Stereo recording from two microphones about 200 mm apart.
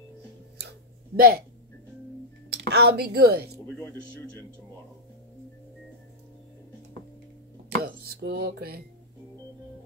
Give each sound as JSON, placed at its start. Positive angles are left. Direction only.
{"t": 0.6, "sound": "a sound", "side_deg": -55}
{"t": 2.5, "sound": "a woman's voice", "side_deg": -55}
{"t": 3.7, "sound": "speech", "side_deg": 5}
{"t": 7.7, "sound": "music", "side_deg": -50}